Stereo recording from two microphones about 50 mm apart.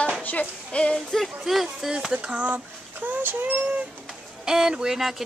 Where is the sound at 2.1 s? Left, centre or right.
Right.